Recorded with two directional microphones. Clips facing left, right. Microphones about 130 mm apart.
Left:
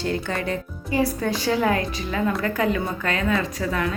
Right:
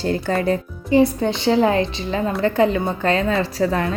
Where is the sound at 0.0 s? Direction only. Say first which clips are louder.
Right 5 dB; 35° right (ahead or behind).